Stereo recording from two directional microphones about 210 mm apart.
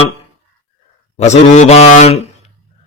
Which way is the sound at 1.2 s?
30° left (ahead or behind).